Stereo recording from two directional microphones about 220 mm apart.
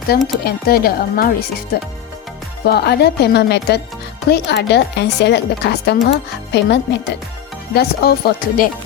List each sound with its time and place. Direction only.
0.1 s a woman's voice: 45° left (ahead or behind)
2.6 s a woman's voice: 45° left (ahead or behind)